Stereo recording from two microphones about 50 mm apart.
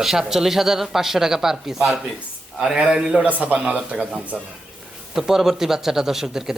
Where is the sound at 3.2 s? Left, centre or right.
Right.